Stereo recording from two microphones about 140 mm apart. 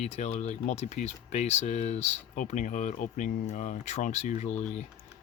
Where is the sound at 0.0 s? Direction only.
55° left (ahead or behind).